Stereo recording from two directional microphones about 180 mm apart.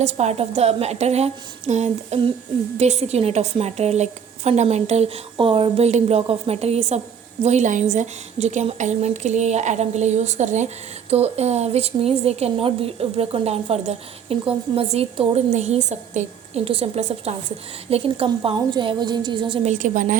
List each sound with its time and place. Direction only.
0.0 s a woman's voice: 40° right (ahead or behind)
19.6 s a woman's voice: 45° right (ahead or behind)